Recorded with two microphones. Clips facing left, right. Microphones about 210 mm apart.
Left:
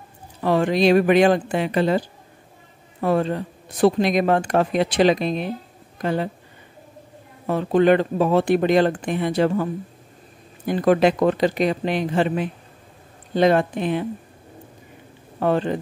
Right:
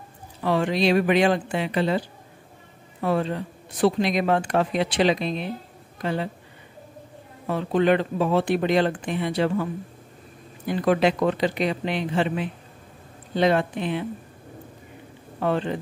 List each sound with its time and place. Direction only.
0.4 s speech: 45° left (ahead or behind)
7.4 s speech: 45° left (ahead or behind)
10.7 s speech: 45° left (ahead or behind)
15.4 s speech: 45° left (ahead or behind)